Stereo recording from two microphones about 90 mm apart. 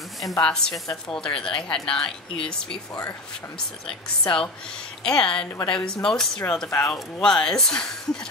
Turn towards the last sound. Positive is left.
turn(degrees=5)  # may be behind; listen again after turning